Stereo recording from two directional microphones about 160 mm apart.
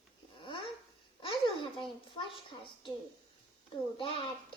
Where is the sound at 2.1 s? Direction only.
30° left (ahead or behind).